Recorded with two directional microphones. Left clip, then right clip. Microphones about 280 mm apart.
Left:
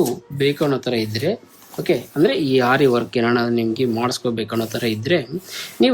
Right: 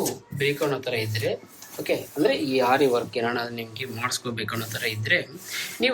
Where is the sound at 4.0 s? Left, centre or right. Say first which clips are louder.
Left 7 dB; centre.